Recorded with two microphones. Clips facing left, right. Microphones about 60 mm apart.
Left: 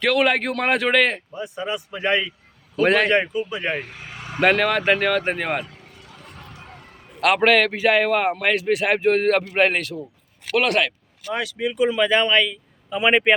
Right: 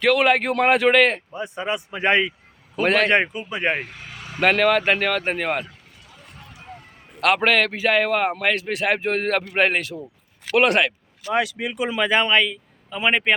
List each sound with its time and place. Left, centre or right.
0.0 s a man's voice: centre
1.3 s speech: right
2.8 s a man's voice: centre
3.1 s speech: right
3.8 s speech: centre
4.1 s vehicle: centre
4.4 s a man's voice: centre
7.2 s a man's voice: centre
10.5 s speech: right
12.9 s a man's voice: centre